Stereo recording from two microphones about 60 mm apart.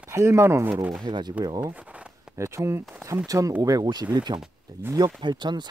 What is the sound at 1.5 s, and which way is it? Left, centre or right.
Speech, right.